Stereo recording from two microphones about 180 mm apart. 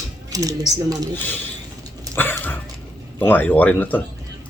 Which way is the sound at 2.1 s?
10° left (ahead or behind).